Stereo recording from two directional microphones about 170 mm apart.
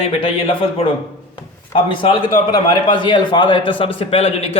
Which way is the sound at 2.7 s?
30° left (ahead or behind).